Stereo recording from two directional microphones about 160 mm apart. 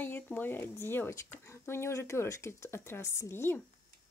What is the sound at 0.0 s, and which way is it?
Speech, 10° left (ahead or behind).